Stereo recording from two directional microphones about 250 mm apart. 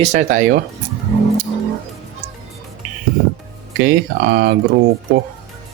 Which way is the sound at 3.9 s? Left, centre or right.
Right.